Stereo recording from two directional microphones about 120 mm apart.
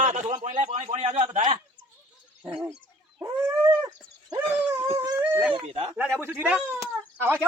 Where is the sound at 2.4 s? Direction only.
10° right (ahead or behind).